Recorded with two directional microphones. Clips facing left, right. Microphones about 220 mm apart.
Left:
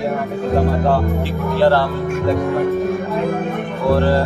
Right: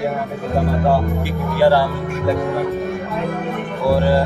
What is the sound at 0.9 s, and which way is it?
A man's voice, 10° right (ahead or behind).